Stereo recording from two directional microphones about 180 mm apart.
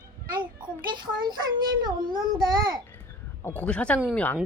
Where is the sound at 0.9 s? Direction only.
25° right (ahead or behind).